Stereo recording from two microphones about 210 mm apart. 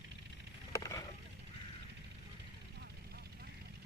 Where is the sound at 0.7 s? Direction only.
15° left (ahead or behind).